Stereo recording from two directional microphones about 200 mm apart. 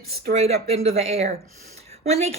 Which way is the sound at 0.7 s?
30° right (ahead or behind).